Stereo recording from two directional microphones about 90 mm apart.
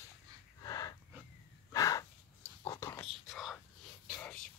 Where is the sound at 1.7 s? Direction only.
40° left (ahead or behind).